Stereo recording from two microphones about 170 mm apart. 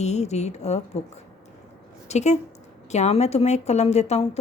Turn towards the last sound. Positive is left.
turn(degrees=40)  # may be behind; listen again after turning